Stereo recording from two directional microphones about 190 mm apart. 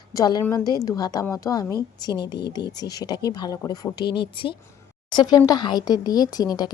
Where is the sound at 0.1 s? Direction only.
20° left (ahead or behind).